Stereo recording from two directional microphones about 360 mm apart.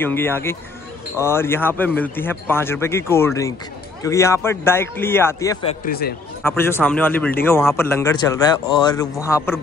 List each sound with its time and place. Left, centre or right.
0.0 s speech: centre
5.9 s speech: left
6.4 s speech: centre